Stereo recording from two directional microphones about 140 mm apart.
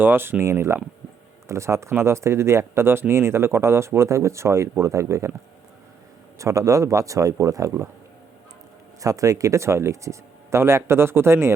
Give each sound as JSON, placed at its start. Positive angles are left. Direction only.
{"t": 0.0, "sound": "speech", "side_deg": -15}
{"t": 6.4, "sound": "speech", "side_deg": -25}
{"t": 9.0, "sound": "speech", "side_deg": -25}